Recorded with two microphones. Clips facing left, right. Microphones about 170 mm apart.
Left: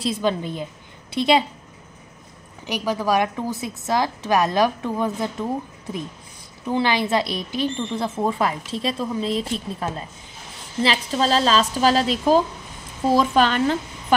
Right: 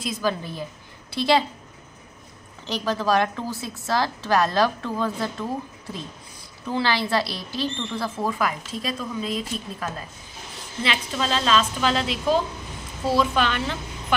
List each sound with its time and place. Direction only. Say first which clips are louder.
0.0 s a woman's voice: left 4 dB; 25° left (ahead or behind)
2.6 s a woman's voice: left 1 dB; 10° left (ahead or behind); by 13.7 s 45° left (ahead or behind)